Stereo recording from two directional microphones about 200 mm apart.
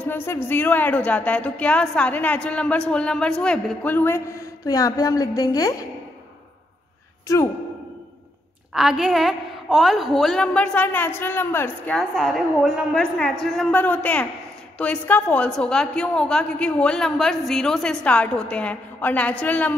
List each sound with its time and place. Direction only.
0.0 s a woman's voice: 10° left (ahead or behind)
7.3 s a woman's voice: 15° left (ahead or behind)
8.7 s a woman's voice: centre (ahead or behind)